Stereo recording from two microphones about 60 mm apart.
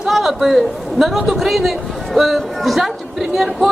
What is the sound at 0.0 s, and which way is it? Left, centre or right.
A man's voice, centre.